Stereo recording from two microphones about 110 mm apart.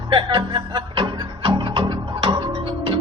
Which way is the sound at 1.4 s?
50° right (ahead or behind).